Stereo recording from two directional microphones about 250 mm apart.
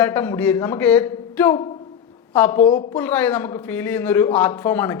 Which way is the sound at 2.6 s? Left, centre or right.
Left.